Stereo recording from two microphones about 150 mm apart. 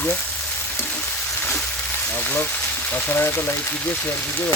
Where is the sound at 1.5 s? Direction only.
15° left (ahead or behind).